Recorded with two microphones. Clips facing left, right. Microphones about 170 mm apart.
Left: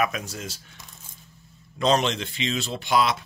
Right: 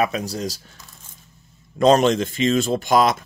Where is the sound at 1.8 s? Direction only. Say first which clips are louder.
Right 7 dB; 50° right (ahead or behind).